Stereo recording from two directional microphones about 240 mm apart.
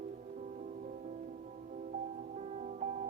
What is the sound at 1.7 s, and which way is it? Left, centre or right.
Music, right.